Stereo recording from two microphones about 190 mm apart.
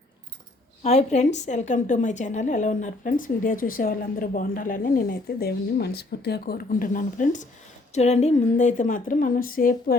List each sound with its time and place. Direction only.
0.8 s a woman's voice: 35° left (ahead or behind)